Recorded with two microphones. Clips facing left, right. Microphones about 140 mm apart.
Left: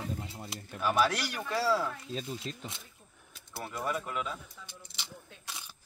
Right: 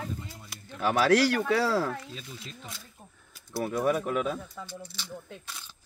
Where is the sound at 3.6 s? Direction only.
70° right (ahead or behind).